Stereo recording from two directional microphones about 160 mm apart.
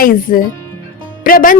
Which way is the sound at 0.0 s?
60° left (ahead or behind).